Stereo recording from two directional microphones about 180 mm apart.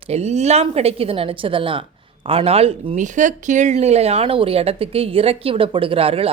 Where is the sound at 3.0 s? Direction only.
45° right (ahead or behind).